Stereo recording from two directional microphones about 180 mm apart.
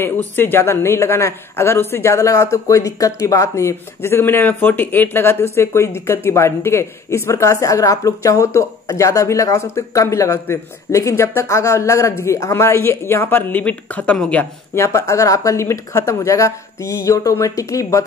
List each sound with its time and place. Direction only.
0.0 s speech: 10° left (ahead or behind)